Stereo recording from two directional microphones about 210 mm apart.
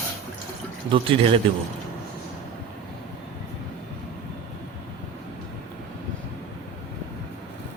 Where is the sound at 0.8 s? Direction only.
25° right (ahead or behind).